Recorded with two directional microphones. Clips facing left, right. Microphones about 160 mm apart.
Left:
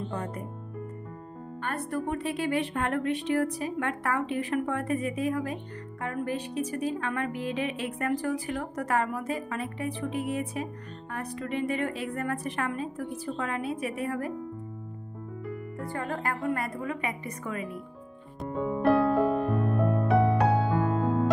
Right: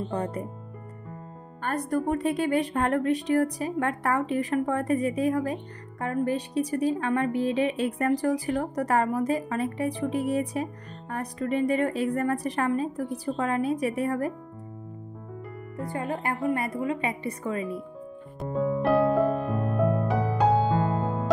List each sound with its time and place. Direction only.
0.1 s speech: 30° right (ahead or behind)
1.6 s speech: 40° right (ahead or behind)
15.8 s speech: 20° right (ahead or behind)
18.4 s music: centre (ahead or behind)